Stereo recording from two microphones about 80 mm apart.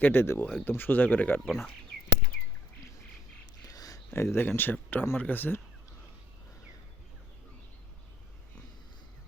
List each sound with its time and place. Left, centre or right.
0.0 s speech: left
1.5 s speech: centre
3.7 s a sound: left
4.1 s speech: left